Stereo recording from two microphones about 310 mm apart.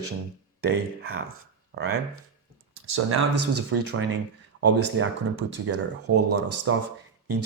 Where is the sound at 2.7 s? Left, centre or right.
Right.